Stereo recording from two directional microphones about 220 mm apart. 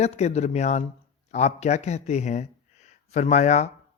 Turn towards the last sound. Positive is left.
turn(degrees=30)  # may be behind; listen again after turning